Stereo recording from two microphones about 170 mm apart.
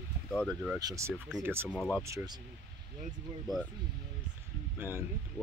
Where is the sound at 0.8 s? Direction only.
20° right (ahead or behind).